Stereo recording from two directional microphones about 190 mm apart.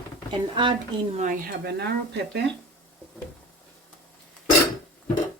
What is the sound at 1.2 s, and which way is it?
Speech, 50° right (ahead or behind).